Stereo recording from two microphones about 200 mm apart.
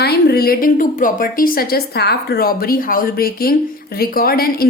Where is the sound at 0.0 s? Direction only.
50° left (ahead or behind).